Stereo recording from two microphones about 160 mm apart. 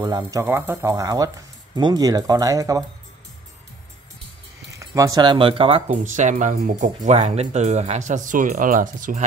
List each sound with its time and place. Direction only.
0.0 s speech: 20° right (ahead or behind)
4.7 s speech: 20° right (ahead or behind)
5.9 s speech: 50° right (ahead or behind)